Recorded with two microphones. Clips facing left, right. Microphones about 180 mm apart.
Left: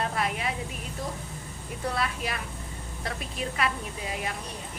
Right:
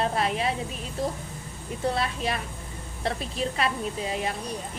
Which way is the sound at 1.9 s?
25° right (ahead or behind).